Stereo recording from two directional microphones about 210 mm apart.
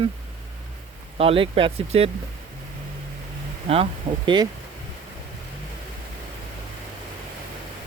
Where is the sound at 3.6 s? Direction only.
30° right (ahead or behind).